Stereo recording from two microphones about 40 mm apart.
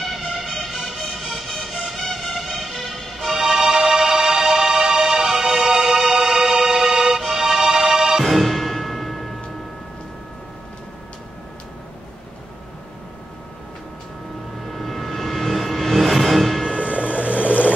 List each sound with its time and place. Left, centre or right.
0.0 s music: centre
2.0 s music: centre
2.3 s music: centre
8.3 s music: centre
14.7 s vehicle: centre
16.7 s vehicle: right